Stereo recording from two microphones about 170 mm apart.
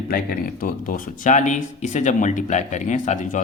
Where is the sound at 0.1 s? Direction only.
60° left (ahead or behind).